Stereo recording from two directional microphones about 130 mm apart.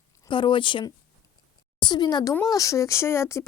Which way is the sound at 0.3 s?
40° left (ahead or behind).